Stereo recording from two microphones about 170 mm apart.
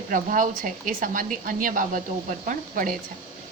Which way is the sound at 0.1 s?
50° right (ahead or behind).